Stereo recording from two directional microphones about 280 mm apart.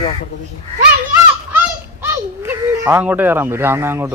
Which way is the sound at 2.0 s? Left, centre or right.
Centre.